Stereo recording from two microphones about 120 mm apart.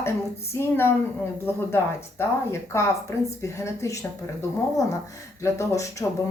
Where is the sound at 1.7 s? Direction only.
20° left (ahead or behind).